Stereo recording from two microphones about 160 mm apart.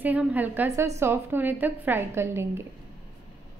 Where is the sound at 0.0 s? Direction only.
10° right (ahead or behind).